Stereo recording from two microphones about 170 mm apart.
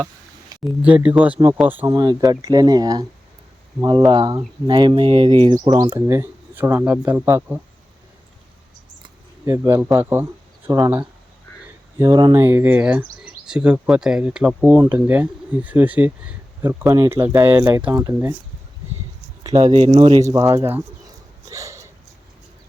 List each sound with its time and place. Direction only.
0.8 s speech: 10° right (ahead or behind)
2.0 s speech: 25° right (ahead or behind)
6.1 s speech: 15° right (ahead or behind)
9.5 s speech: 15° right (ahead or behind)
19.4 s a sound: 20° right (ahead or behind)
19.6 s speech: 45° right (ahead or behind)
20.3 s speech: 20° right (ahead or behind)
21.5 s dog: 20° right (ahead or behind)